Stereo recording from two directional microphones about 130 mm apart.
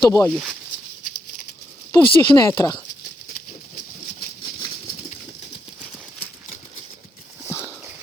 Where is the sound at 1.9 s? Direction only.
35° left (ahead or behind).